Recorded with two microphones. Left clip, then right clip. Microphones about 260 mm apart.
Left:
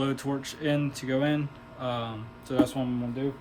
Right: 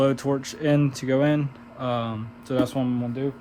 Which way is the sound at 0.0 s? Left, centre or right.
Right.